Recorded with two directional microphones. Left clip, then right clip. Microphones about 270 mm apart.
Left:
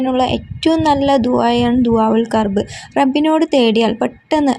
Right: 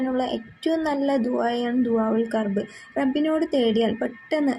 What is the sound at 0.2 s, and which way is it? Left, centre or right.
A woman's voice, left.